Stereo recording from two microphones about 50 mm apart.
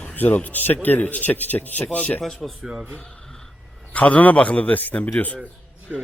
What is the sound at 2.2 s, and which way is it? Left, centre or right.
Speech, centre.